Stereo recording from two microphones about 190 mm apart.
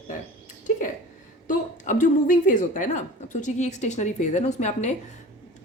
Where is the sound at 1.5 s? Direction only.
45° left (ahead or behind).